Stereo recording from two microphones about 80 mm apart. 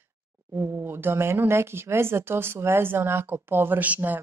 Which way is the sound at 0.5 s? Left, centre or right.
Right.